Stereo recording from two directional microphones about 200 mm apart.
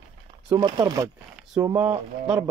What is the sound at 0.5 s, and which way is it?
Speech, 20° right (ahead or behind).